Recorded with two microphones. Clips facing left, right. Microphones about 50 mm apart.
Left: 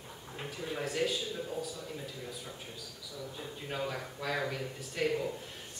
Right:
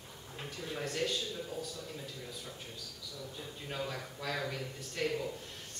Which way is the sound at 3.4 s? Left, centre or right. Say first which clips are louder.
Left 3 dB; centre.